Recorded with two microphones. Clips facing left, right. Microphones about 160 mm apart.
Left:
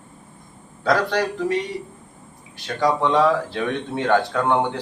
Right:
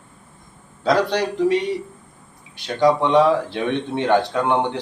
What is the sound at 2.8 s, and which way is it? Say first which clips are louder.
Speech: right 3 dB; 20° right (ahead or behind).